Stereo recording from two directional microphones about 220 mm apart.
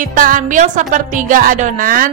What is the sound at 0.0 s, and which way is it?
A woman's voice, 35° right (ahead or behind).